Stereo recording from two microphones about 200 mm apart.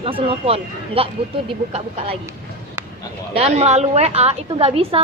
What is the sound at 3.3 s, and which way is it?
Speech, 30° right (ahead or behind).